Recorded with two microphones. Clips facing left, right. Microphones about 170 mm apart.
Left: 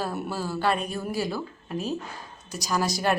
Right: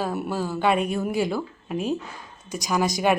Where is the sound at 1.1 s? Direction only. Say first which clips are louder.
Right 2 dB; 20° right (ahead or behind).